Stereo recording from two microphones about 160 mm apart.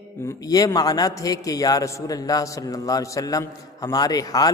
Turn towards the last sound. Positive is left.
turn(degrees=25)  # may be behind; listen again after turning